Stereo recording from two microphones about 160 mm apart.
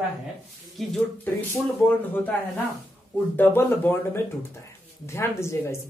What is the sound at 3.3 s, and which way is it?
Speech, 15° left (ahead or behind).